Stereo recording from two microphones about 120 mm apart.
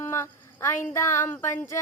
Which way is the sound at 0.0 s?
20° left (ahead or behind).